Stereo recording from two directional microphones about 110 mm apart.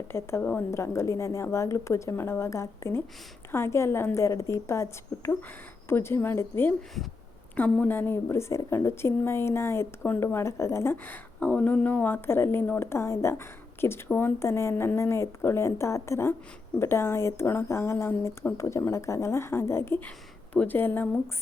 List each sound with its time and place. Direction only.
0.1 s a woman's voice: 25° left (ahead or behind)